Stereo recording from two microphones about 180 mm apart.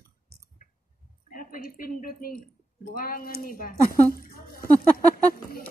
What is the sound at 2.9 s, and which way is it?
Speech, 55° left (ahead or behind).